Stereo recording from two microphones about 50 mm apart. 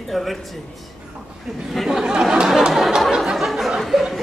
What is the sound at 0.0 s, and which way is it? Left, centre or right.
Speech, centre.